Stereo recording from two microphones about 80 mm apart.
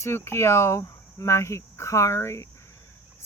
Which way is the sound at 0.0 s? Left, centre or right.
Left.